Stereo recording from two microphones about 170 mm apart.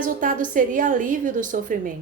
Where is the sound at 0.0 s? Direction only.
50° right (ahead or behind).